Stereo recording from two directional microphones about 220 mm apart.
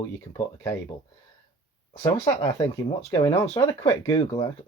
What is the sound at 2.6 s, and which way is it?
Speech, 15° left (ahead or behind).